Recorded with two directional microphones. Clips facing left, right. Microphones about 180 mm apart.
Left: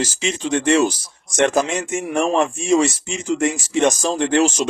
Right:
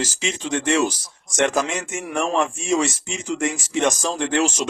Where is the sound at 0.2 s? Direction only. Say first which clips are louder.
Left 4 dB; 30° left (ahead or behind).